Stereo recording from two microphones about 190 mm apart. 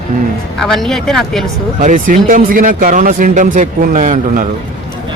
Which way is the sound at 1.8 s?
45° right (ahead or behind).